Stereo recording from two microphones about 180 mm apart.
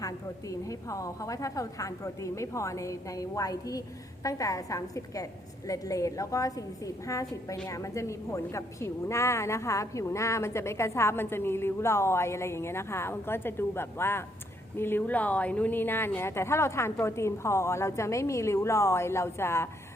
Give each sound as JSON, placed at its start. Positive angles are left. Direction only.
{"t": 0.0, "sound": "a woman's voice", "side_deg": 20}